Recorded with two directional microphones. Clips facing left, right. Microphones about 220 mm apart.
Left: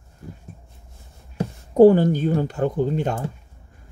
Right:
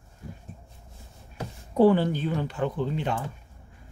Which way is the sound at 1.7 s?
45° left (ahead or behind).